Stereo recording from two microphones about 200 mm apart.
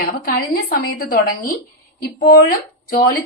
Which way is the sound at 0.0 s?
45° left (ahead or behind).